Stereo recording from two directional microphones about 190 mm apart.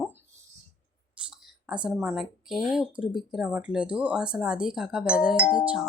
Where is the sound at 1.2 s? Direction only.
5° right (ahead or behind).